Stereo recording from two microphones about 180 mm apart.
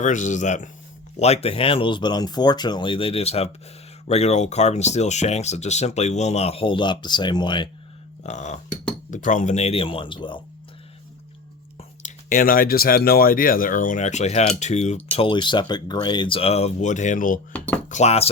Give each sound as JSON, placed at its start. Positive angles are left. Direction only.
{"t": 0.0, "sound": "speech", "side_deg": 45}
{"t": 8.2, "sound": "speech", "side_deg": 40}
{"t": 11.8, "sound": "speech", "side_deg": 45}